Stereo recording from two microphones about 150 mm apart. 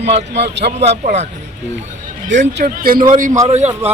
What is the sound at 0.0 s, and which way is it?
Speech, 45° right (ahead or behind).